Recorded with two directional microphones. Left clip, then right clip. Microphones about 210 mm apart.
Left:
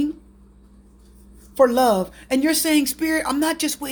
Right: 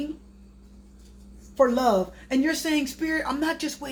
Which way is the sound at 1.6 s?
55° left (ahead or behind).